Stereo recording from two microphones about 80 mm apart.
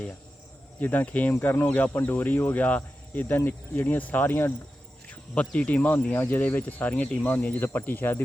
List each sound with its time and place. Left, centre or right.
0.8 s speech: left
5.5 s speech: centre